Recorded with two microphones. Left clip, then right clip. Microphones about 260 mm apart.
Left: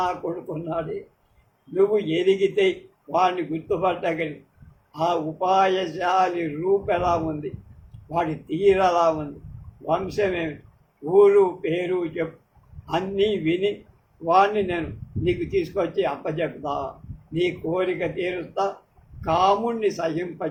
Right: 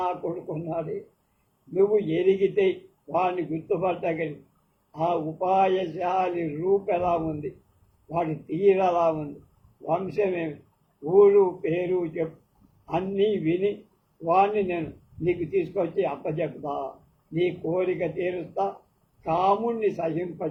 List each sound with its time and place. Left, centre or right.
0.0 s a man's voice: left
8.6 s a man's voice: left